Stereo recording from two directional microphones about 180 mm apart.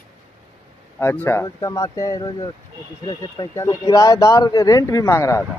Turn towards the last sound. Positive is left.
turn(degrees=15)  # may be behind; listen again after turning